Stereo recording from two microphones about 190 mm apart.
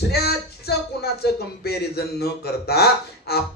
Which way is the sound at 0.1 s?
55° left (ahead or behind).